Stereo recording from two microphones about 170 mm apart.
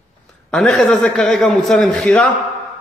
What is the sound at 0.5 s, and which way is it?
A man's voice, 5° left (ahead or behind).